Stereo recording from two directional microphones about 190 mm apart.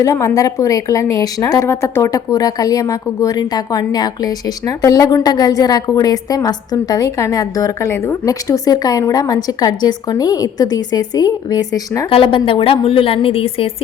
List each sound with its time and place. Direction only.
0.0 s a woman's voice: 15° left (ahead or behind)